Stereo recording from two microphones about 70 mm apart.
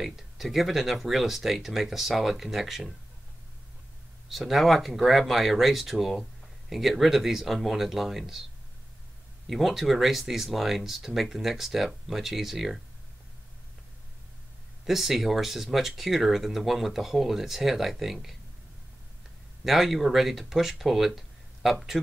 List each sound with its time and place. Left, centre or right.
0.0 s speech: centre
4.3 s speech: centre
9.5 s speech: centre
14.9 s speech: centre
19.6 s speech: centre